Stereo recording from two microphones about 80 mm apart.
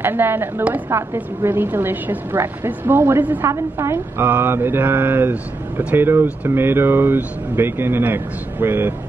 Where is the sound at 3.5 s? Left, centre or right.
Right.